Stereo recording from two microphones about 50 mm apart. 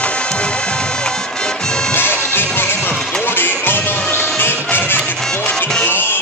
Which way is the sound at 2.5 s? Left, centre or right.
Left.